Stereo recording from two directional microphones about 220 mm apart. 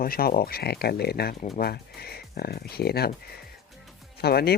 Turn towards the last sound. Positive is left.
turn(degrees=45)  # may be behind; listen again after turning